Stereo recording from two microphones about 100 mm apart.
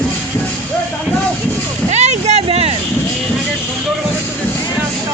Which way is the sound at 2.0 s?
90° right.